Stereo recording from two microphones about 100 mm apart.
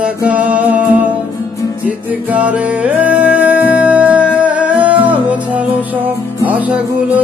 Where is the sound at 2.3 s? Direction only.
15° right (ahead or behind).